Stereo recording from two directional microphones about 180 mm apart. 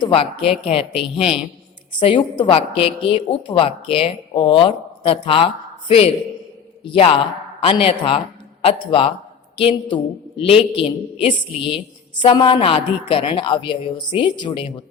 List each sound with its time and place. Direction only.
0.0 s a woman's voice: 30° left (ahead or behind)
6.8 s a woman's voice: 30° left (ahead or behind)